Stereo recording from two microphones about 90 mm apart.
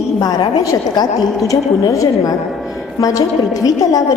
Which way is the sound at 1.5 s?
40° left (ahead or behind).